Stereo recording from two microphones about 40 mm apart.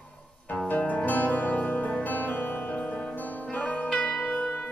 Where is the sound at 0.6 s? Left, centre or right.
Left.